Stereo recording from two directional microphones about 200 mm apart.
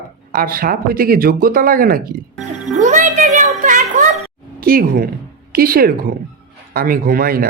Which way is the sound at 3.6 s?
40° right (ahead or behind).